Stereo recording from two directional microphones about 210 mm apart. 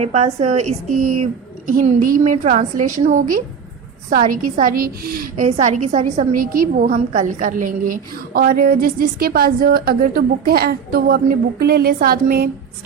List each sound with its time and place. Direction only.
0.0 s a woman's voice: 30° right (ahead or behind)
5.5 s a woman's voice: 35° right (ahead or behind)